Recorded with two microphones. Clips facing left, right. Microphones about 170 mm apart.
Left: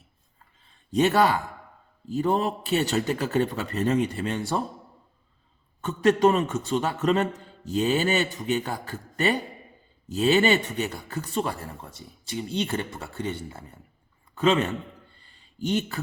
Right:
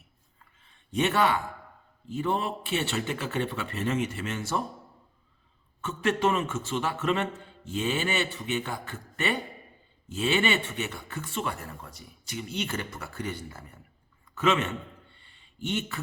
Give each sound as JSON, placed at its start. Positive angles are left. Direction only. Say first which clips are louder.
{"t": 0.9, "sound": "speech", "louder": "left 4 dB", "side_deg": 35}
{"t": 5.8, "sound": "speech", "louder": "left 6 dB", "side_deg": 35}
{"t": 14.3, "sound": "a sound", "louder": "left 4 dB", "side_deg": 35}